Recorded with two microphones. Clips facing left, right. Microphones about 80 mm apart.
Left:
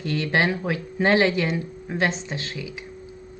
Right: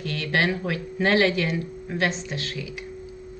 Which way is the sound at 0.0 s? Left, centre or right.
Left.